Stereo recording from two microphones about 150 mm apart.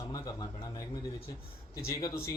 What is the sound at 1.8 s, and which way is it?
Speech, 15° left (ahead or behind).